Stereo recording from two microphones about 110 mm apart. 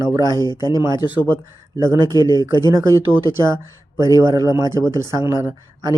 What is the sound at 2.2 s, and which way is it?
Speech, 40° left (ahead or behind).